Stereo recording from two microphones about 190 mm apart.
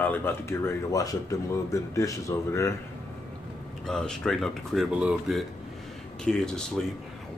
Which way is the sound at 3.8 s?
5° left (ahead or behind).